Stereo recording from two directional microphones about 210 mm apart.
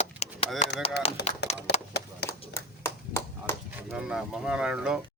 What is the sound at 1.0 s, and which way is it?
Speech, 30° left (ahead or behind).